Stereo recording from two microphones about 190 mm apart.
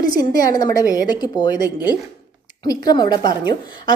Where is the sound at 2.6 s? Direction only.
20° left (ahead or behind).